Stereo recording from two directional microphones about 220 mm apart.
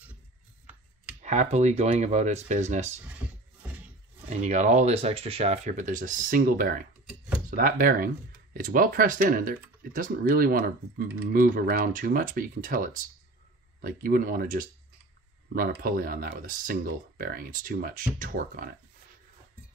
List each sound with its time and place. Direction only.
1.2 s speech: 30° right (ahead or behind)
4.3 s speech: 30° right (ahead or behind)